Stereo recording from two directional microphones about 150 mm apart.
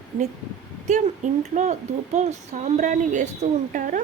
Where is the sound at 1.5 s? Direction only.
55° right (ahead or behind).